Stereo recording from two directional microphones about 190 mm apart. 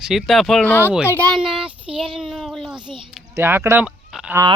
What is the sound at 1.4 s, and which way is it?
Speech, 5° right (ahead or behind).